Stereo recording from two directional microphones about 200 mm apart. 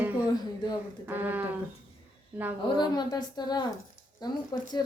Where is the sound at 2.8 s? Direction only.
20° left (ahead or behind).